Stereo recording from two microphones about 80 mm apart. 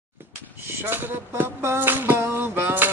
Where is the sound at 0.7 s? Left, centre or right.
Right.